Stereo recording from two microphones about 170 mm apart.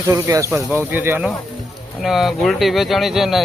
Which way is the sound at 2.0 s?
Centre (ahead or behind).